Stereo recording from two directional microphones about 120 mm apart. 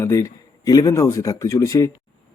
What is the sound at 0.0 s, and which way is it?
Speech, 25° left (ahead or behind).